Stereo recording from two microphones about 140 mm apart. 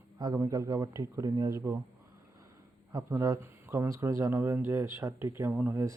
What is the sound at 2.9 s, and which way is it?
Speech, 25° right (ahead or behind).